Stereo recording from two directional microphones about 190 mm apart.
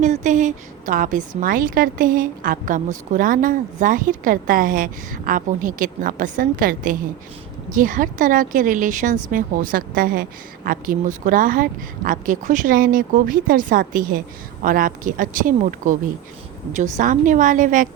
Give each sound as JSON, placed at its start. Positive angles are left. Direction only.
{"t": 0.0, "sound": "a woman's voice", "side_deg": -40}